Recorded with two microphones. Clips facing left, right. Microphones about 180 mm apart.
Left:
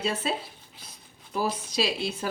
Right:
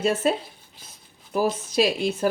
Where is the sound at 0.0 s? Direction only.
50° right (ahead or behind).